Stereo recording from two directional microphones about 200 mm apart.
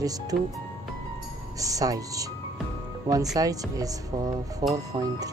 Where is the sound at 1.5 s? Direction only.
15° right (ahead or behind).